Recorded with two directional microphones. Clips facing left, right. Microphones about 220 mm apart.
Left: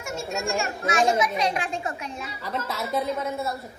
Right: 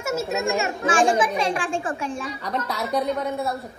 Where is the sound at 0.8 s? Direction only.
30° right (ahead or behind).